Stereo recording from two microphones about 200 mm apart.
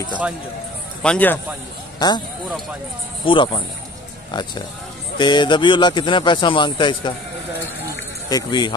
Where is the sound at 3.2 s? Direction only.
25° left (ahead or behind).